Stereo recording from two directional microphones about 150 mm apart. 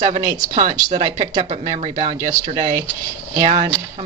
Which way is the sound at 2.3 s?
60° right (ahead or behind).